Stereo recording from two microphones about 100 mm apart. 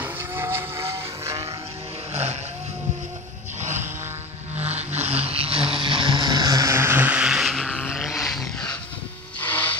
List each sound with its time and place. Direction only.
0.0 s vehicle: 25° right (ahead or behind)
4.6 s vehicle: 90° right; by 6.7 s 40° right (ahead or behind)
6.7 s vehicle: 25° right (ahead or behind); by 8.5 s centre (ahead or behind)
9.4 s a sound: 15° left (ahead or behind)